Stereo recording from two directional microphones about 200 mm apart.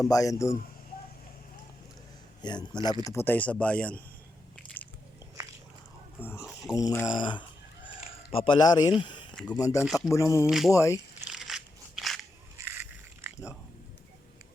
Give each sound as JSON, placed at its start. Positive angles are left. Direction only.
{"t": 0.1, "sound": "speech", "side_deg": 15}
{"t": 2.4, "sound": "speech", "side_deg": 20}
{"t": 6.1, "sound": "speech", "side_deg": 10}
{"t": 6.4, "sound": "a sound", "side_deg": 0}
{"t": 6.7, "sound": "a sound", "side_deg": 15}
{"t": 9.0, "sound": "speech", "side_deg": 25}
{"t": 9.8, "sound": "speech", "side_deg": 0}
{"t": 10.2, "sound": "speech", "side_deg": 15}
{"t": 10.4, "sound": "speech", "side_deg": 0}
{"t": 10.7, "sound": "speech", "side_deg": 15}
{"t": 11.3, "sound": "crushing", "side_deg": 0}
{"t": 12.5, "sound": "biting", "side_deg": -10}